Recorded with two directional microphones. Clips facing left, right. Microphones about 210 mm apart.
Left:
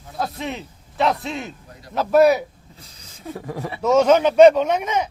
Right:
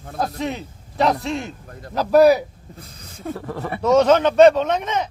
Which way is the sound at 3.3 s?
15° left (ahead or behind).